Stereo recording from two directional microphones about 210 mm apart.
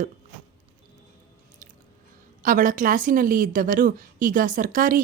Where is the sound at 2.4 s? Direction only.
40° right (ahead or behind).